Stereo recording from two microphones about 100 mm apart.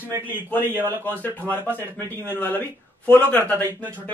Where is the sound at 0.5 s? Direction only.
20° left (ahead or behind).